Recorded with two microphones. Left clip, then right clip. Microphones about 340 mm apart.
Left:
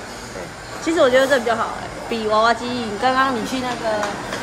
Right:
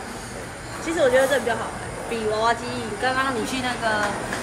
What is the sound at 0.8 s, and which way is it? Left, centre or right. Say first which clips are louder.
Speech: left 4 dB; left.